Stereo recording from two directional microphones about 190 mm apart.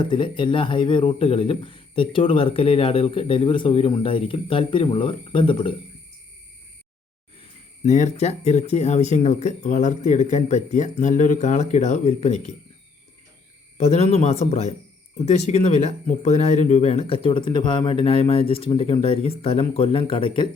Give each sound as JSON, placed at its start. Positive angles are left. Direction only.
{"t": 0.0, "sound": "speech", "side_deg": 25}
{"t": 7.9, "sound": "speech", "side_deg": 40}
{"t": 13.7, "sound": "speech", "side_deg": 35}